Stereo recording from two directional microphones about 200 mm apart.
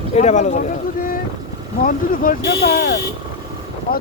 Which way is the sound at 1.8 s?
45° left (ahead or behind).